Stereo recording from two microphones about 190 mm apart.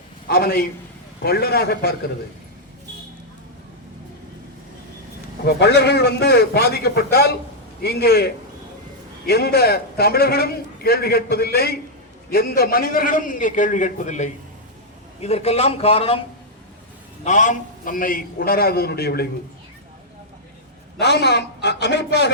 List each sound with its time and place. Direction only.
0.3 s a man's voice: 50° left (ahead or behind)
5.5 s a man's voice: 60° left (ahead or behind); by 16.2 s 30° left (ahead or behind)
17.2 s a man's voice: 40° left (ahead or behind); by 19.3 s 55° left (ahead or behind)
21.0 s a man's voice: 65° left (ahead or behind)